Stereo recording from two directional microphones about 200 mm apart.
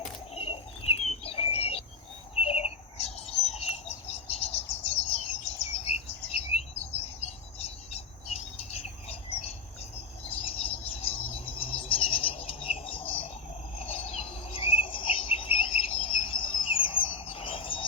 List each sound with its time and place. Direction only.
0.3 s a sound: 30° left (ahead or behind)
2.3 s bird: 30° left (ahead or behind)
13.7 s cricket: 30° left (ahead or behind)